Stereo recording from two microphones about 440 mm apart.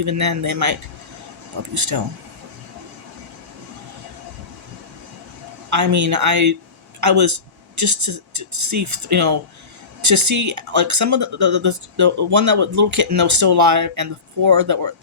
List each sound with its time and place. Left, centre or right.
0.0 s speech: right
5.7 s speech: right